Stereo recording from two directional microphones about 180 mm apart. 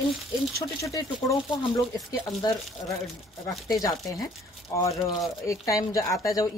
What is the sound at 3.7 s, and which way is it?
Speech, 20° left (ahead or behind).